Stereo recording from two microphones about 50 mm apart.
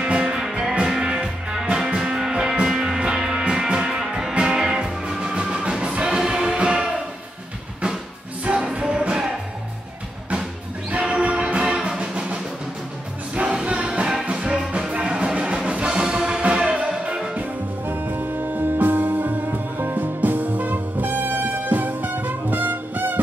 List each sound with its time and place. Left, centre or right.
0.0 s music: right
0.3 s music: centre
8.5 s music: centre
10.9 s music: right
13.3 s music: right
17.8 s music: right